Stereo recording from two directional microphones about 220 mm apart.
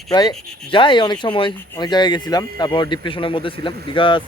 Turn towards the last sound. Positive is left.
turn(degrees=20)  # may be behind; listen again after turning